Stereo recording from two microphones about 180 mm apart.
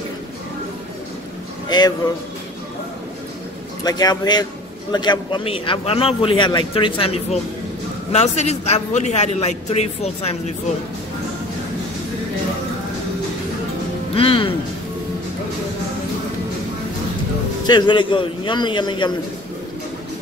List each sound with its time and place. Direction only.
1.7 s a man's voice: 25° left (ahead or behind)
3.8 s a man's voice: 20° left (ahead or behind)
14.1 s a man's voice: 30° left (ahead or behind)
17.6 s a man's voice: 25° left (ahead or behind)